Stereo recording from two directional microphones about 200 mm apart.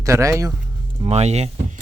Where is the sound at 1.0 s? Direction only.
30° right (ahead or behind).